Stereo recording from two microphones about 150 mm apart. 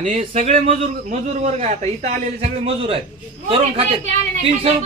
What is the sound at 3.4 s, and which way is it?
Speech, 40° right (ahead or behind).